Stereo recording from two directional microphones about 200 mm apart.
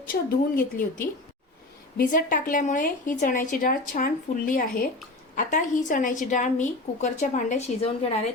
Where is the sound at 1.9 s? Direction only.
45° left (ahead or behind).